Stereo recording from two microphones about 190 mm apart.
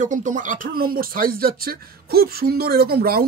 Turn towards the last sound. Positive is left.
turn(degrees=-50)  # may be behind; listen again after turning